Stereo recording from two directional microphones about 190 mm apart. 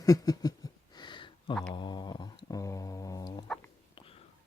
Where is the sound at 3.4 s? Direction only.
5° left (ahead or behind).